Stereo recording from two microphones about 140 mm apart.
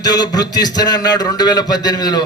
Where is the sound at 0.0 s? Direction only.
30° left (ahead or behind).